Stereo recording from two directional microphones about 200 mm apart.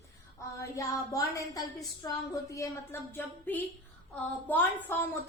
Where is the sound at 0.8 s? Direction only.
15° left (ahead or behind).